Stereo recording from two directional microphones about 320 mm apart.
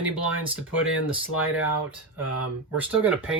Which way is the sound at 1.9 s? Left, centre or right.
Right.